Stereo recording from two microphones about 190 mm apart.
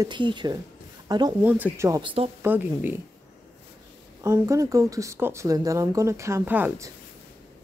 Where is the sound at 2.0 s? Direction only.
30° right (ahead or behind).